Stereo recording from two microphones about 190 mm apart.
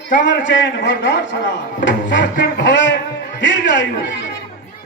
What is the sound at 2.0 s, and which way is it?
Speech, 70° left (ahead or behind).